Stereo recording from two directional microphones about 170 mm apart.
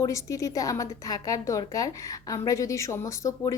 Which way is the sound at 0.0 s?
20° left (ahead or behind).